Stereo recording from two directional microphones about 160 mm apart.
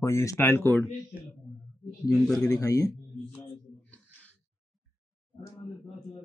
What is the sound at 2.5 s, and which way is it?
Speech, 20° left (ahead or behind).